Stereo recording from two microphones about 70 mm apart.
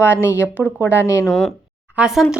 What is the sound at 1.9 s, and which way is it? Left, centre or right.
Speech, centre.